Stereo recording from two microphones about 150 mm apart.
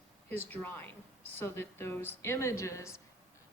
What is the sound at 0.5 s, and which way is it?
A woman's voice, 10° left (ahead or behind).